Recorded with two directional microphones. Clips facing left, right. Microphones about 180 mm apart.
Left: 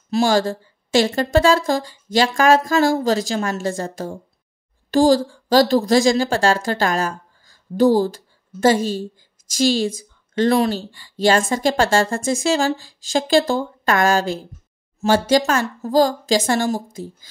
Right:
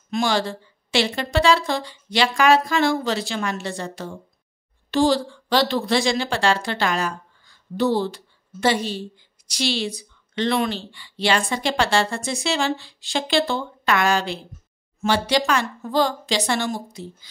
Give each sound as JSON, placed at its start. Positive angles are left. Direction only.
{"t": 0.1, "sound": "a woman's voice", "side_deg": 40}